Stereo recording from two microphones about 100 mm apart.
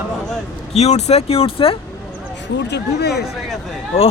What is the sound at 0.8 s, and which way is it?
Speech, 90° left.